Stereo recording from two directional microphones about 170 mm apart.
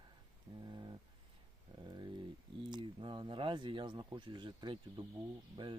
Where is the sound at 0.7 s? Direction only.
25° right (ahead or behind).